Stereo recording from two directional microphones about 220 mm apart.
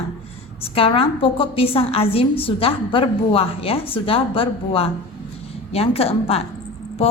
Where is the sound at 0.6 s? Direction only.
25° left (ahead or behind).